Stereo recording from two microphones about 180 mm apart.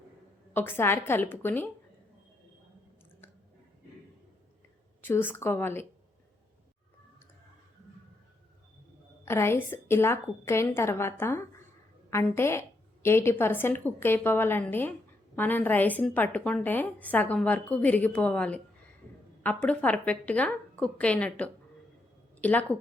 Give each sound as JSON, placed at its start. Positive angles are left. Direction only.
{"t": 0.5, "sound": "a woman's voice", "side_deg": 10}
{"t": 5.0, "sound": "a woman's voice", "side_deg": 10}
{"t": 9.2, "sound": "a woman's voice", "side_deg": 15}